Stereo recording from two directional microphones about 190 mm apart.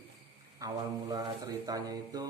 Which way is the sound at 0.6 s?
20° right (ahead or behind).